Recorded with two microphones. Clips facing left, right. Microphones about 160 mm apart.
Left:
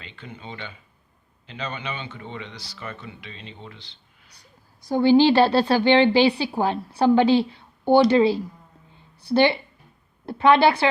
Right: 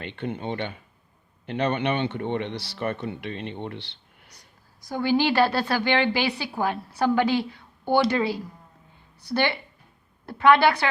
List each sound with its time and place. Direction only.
0.0 s speech: 60° right (ahead or behind)
4.9 s a woman's voice: 25° left (ahead or behind)
9.3 s a woman's voice: 20° left (ahead or behind)